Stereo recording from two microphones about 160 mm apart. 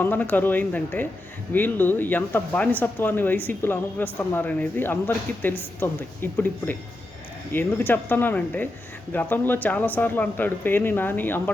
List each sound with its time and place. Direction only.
0.0 s speech: 10° left (ahead or behind)